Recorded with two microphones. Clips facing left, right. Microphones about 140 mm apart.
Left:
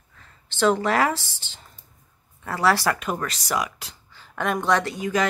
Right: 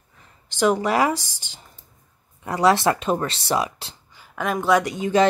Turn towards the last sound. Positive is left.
turn(degrees=-25)  # may be behind; listen again after turning